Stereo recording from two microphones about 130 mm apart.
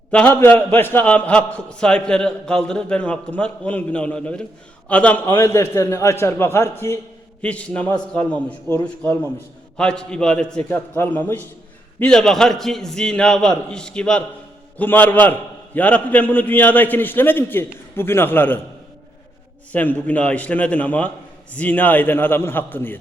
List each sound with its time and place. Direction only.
0.1 s a man's voice: 10° left (ahead or behind)
7.4 s a man's voice: 10° left (ahead or behind)
19.7 s a man's voice: 10° left (ahead or behind)